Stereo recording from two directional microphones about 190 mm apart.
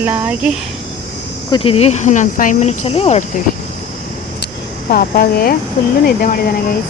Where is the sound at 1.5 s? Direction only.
30° left (ahead or behind).